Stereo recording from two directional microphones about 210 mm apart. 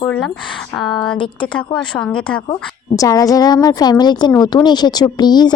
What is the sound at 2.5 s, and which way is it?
A woman's voice, 25° left (ahead or behind).